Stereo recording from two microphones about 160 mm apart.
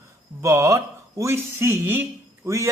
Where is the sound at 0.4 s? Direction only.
20° right (ahead or behind).